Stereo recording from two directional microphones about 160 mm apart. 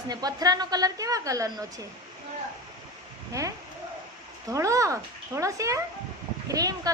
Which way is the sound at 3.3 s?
20° right (ahead or behind).